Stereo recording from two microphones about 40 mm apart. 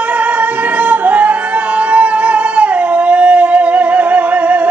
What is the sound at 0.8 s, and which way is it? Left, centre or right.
Music, right.